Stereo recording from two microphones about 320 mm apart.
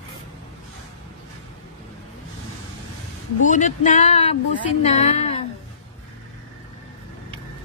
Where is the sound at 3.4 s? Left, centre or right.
Left.